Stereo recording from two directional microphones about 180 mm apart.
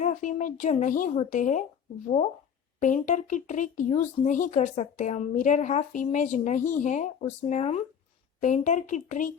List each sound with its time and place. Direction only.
0.0 s speech: 45° left (ahead or behind)